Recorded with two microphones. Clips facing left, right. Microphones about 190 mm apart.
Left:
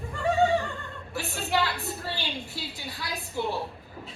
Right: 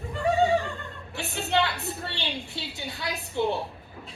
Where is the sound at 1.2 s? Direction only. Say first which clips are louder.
Right 2 dB; 25° right (ahead or behind).